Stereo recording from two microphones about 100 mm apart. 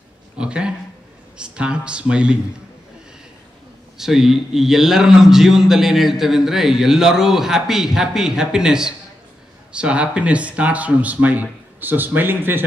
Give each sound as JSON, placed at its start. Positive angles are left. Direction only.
{"t": 0.4, "sound": "a man's voice", "side_deg": -10}
{"t": 4.0, "sound": "a man's voice", "side_deg": -5}